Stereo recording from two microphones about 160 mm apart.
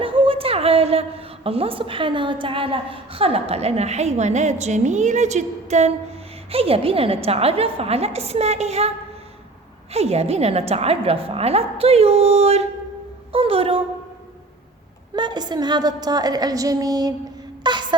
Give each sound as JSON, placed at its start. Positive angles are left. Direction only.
{"t": 0.0, "sound": "a woman's voice", "side_deg": -35}
{"t": 9.9, "sound": "a woman's voice", "side_deg": -40}
{"t": 15.1, "sound": "a woman's voice", "side_deg": -30}